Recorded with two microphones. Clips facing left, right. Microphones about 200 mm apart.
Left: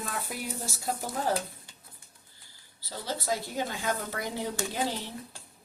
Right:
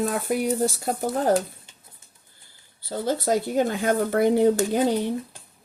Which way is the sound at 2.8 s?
50° right (ahead or behind).